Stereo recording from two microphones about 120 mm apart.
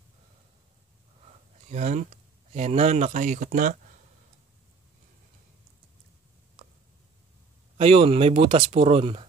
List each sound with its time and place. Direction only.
1.7 s speech: 90° right
2.5 s speech: 65° right (ahead or behind); by 3.7 s 90° right
7.7 s speech: 55° right (ahead or behind)